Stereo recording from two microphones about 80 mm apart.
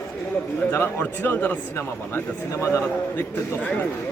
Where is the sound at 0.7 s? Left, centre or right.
Left.